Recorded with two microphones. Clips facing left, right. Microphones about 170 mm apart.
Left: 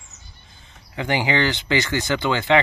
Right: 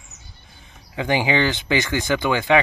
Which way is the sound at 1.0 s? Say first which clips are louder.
Right 1 dB; 15° right (ahead or behind).